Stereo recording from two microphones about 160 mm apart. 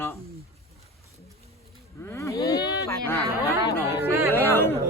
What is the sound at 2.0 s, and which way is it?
Speech, 15° left (ahead or behind).